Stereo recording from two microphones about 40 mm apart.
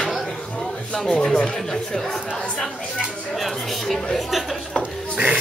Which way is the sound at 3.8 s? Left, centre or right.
Centre.